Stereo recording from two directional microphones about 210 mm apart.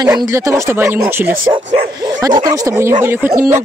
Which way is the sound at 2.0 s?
20° right (ahead or behind).